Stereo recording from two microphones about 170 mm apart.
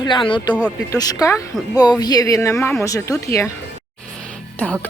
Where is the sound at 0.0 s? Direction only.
30° left (ahead or behind).